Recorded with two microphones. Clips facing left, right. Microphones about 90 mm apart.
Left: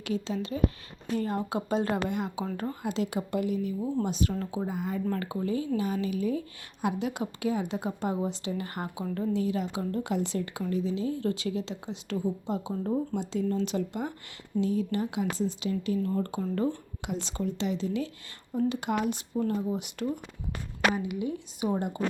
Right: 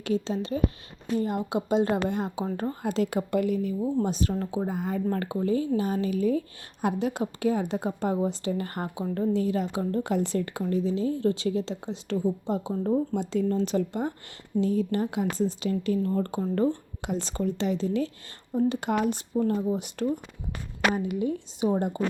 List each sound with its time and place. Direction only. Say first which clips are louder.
0.0 s speech: right 4 dB; 35° right (ahead or behind)
1.0 s speech: right 2 dB; 20° right (ahead or behind)
2.8 s speech: right 4 dB; 45° right (ahead or behind)
4.0 s speech: right 2 dB; 35° right (ahead or behind)
12.7 s speech: right 5 dB; 20° right (ahead or behind)
13.1 s speech: right 3 dB; 45° right (ahead or behind)